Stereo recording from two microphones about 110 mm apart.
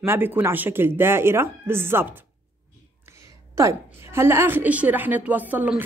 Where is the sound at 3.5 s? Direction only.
25° right (ahead or behind).